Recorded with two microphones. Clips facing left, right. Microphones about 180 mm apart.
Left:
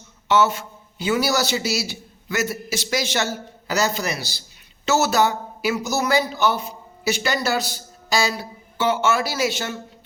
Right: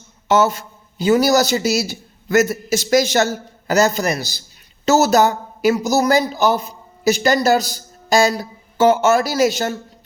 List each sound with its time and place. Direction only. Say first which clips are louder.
0.3 s a man's voice: right 3 dB; 40° right (ahead or behind)